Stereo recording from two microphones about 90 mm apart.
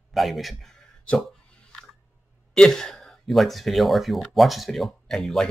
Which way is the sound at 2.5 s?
5° left (ahead or behind).